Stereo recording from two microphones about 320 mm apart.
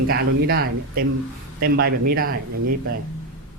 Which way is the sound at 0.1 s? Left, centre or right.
Right.